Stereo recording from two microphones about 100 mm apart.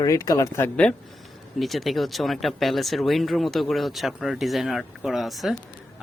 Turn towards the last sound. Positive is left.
turn(degrees=0)  # may be behind; listen again after turning